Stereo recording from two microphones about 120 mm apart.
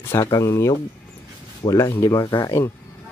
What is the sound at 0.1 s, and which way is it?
Speech, 25° left (ahead or behind).